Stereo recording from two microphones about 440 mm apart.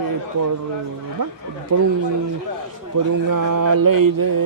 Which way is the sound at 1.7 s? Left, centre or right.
Right.